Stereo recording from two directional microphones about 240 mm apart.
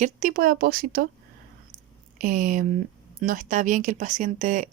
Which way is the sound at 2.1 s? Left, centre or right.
Right.